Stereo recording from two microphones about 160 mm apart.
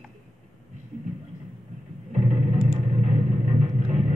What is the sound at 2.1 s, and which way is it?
Music, 50° right (ahead or behind).